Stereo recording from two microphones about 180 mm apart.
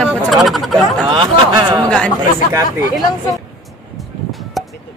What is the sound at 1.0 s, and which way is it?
Speech, 25° right (ahead or behind).